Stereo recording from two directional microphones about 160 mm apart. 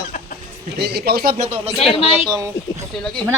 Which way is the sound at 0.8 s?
85° right.